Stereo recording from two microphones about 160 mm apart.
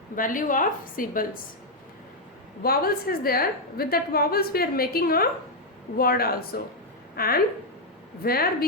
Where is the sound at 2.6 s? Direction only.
70° left (ahead or behind).